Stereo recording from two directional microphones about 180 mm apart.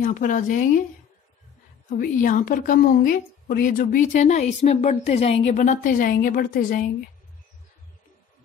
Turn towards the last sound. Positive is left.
turn(degrees=50)  # may be behind; listen again after turning